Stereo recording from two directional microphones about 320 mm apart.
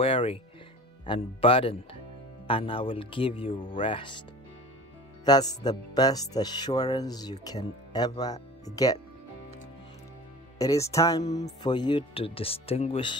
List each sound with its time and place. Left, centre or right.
0.0 s speech: centre
5.2 s speech: centre
10.6 s speech: centre